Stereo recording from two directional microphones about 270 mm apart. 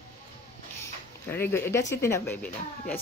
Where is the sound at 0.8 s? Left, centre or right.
Centre.